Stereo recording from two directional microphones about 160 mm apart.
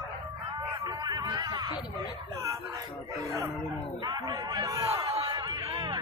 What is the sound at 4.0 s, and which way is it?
Speech, 25° right (ahead or behind).